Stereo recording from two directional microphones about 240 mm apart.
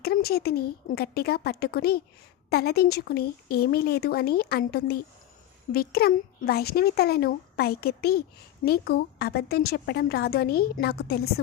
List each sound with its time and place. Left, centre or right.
0.0 s a woman's voice: left